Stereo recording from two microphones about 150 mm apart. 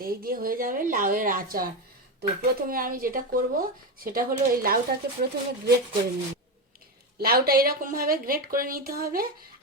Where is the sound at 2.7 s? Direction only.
70° right (ahead or behind).